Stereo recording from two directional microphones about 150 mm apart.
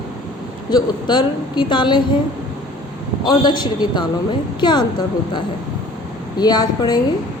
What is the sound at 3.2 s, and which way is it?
A woman's voice, 30° left (ahead or behind).